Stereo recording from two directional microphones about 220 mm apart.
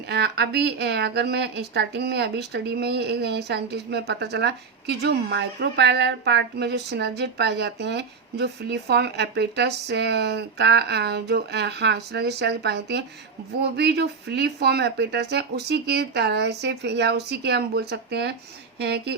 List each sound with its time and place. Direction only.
0.1 s speech: 50° right (ahead or behind)